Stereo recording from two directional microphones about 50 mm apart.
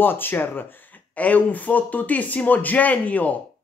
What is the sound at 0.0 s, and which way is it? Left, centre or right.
Speech, left.